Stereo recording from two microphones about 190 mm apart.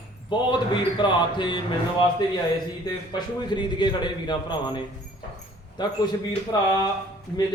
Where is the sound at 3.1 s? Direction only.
25° left (ahead or behind).